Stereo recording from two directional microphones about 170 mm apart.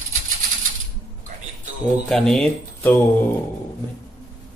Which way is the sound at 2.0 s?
5° left (ahead or behind).